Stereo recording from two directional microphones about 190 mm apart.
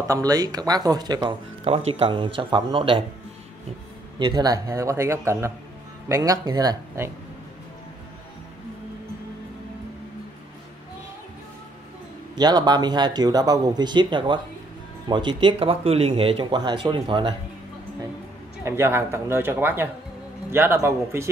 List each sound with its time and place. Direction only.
0.1 s speech: 20° right (ahead or behind)
4.2 s speech: 20° right (ahead or behind)
12.4 s speech: 20° right (ahead or behind)
18.6 s speech: 10° right (ahead or behind)